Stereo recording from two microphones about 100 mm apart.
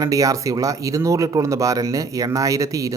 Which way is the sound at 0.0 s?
35° right (ahead or behind).